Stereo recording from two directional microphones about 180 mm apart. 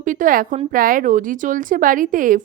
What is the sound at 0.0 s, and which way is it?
A woman's voice, 45° right (ahead or behind).